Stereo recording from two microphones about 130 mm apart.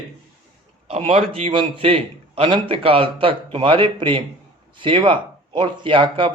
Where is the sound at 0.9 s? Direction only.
55° right (ahead or behind).